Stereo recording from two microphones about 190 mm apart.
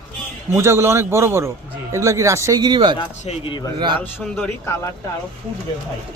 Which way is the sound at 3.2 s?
25° left (ahead or behind).